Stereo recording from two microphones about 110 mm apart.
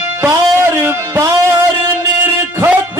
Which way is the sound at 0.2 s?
20° right (ahead or behind).